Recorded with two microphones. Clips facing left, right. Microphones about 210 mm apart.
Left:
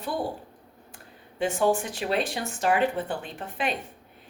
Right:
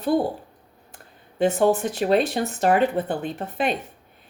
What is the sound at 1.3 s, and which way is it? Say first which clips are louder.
Speech: right 5 dB; 40° right (ahead or behind).